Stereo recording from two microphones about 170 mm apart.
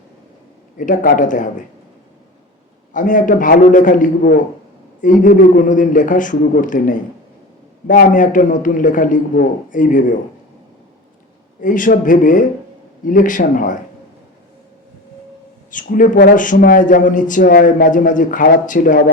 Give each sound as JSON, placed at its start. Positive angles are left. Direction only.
{"t": 0.8, "sound": "a man's voice", "side_deg": 50}
{"t": 2.9, "sound": "a man's voice", "side_deg": 50}
{"t": 11.6, "sound": "a man's voice", "side_deg": 50}
{"t": 15.7, "sound": "a man's voice", "side_deg": 50}